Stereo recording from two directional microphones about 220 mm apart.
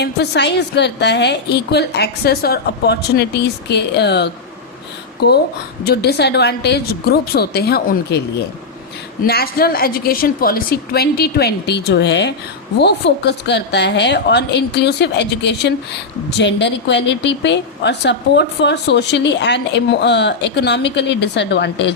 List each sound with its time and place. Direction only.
0.0 s a woman's voice: 50° left (ahead or behind)
9.2 s a woman's voice: 45° left (ahead or behind)